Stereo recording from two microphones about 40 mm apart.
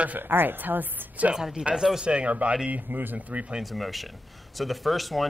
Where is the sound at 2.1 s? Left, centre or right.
Right.